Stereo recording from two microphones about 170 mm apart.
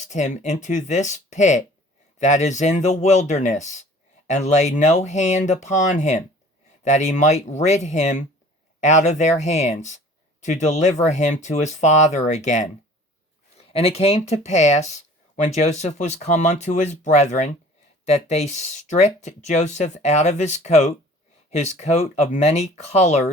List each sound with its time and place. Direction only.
0.0 s speech: 45° left (ahead or behind)